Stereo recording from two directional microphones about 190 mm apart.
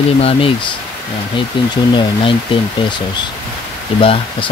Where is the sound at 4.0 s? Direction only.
30° left (ahead or behind).